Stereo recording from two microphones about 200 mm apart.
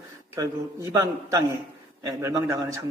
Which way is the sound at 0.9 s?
15° right (ahead or behind).